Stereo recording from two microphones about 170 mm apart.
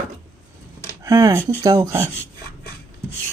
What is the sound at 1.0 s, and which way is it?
Speech, 20° right (ahead or behind).